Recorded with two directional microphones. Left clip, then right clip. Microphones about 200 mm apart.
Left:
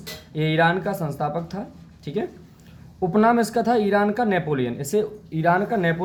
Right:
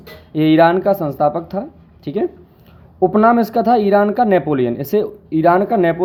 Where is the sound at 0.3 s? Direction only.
45° right (ahead or behind).